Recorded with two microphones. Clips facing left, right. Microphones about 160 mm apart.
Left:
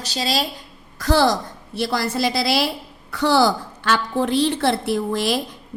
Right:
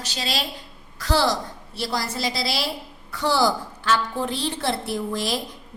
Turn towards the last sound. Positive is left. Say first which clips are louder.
# left 5 dB
turn(degrees=65)  # may be behind; listen again after turning